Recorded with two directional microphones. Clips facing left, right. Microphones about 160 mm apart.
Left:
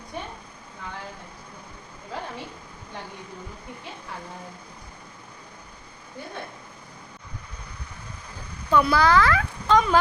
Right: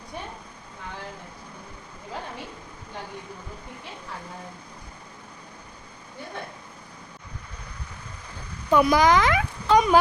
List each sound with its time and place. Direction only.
8.7 s speech: 15° right (ahead or behind)